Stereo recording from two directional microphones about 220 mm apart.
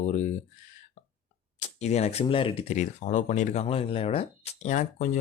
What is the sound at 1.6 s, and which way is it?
Speech, 30° left (ahead or behind).